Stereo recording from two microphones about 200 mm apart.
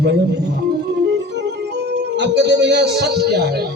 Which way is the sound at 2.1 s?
60° right (ahead or behind).